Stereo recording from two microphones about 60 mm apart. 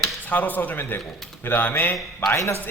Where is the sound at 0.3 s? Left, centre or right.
Left.